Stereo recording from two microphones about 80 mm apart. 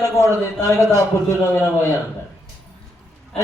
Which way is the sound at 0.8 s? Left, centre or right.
Right.